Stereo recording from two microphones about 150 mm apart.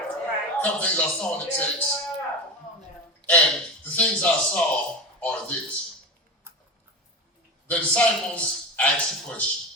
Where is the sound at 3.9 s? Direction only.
10° left (ahead or behind).